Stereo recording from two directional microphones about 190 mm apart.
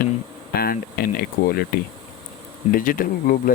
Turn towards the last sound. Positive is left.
turn(degrees=45)  # may be behind; listen again after turning